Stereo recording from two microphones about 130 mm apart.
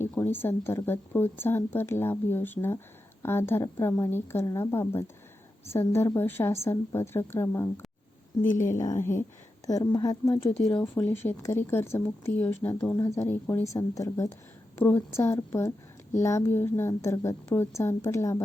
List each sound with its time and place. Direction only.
0.0 s a woman's voice: 15° left (ahead or behind)
8.8 s a woman's voice: 20° left (ahead or behind)